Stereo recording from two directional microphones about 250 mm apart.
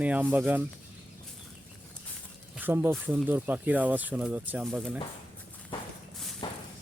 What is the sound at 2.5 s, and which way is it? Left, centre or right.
Speech, centre.